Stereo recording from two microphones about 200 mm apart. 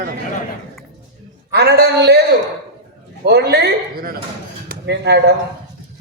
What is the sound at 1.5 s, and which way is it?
Speech, 50° right (ahead or behind).